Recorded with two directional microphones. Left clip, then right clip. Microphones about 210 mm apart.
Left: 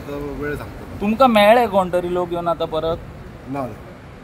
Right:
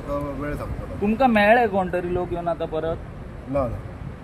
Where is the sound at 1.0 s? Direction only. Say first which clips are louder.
Left 5 dB; 45° left (ahead or behind).